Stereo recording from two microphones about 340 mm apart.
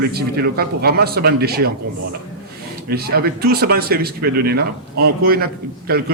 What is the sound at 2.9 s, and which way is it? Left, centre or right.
Speech, right.